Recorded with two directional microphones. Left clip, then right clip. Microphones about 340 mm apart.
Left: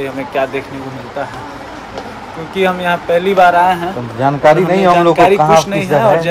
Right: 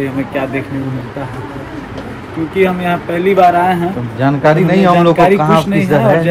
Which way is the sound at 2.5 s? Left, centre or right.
Centre.